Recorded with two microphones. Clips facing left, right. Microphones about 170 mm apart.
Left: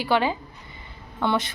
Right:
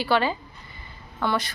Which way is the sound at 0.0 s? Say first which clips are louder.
Even; 15° left (ahead or behind).